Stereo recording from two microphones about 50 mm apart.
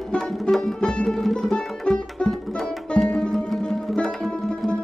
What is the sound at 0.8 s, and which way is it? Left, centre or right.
Music, centre.